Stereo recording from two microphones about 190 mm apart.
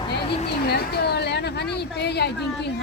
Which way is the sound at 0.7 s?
60° left (ahead or behind).